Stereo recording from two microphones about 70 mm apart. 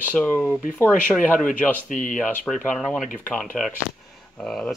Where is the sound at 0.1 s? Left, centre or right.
Centre.